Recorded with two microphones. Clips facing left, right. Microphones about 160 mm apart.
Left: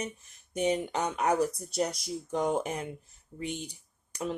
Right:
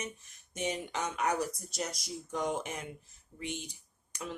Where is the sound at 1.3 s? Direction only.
45° left (ahead or behind).